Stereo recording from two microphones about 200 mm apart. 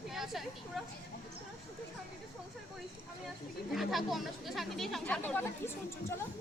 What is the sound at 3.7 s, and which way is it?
Chatter, centre (ahead or behind).